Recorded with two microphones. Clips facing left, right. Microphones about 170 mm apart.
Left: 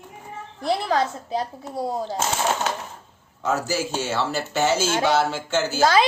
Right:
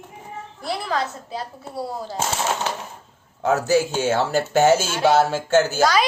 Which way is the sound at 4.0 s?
50° right (ahead or behind).